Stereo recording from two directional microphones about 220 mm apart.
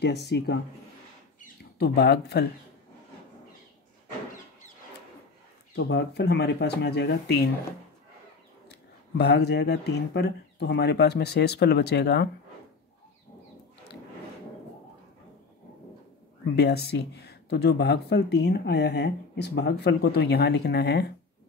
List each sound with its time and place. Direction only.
0.0 s speech: 50° left (ahead or behind)
5.8 s speech: 50° left (ahead or behind)
8.6 s speech: 50° left (ahead or behind)
16.5 s speech: 45° left (ahead or behind)